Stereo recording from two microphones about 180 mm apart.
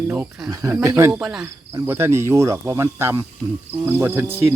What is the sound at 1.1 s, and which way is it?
Speech, 5° right (ahead or behind).